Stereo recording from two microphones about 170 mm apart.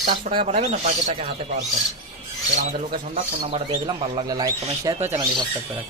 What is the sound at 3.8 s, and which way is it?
Speech, 25° right (ahead or behind).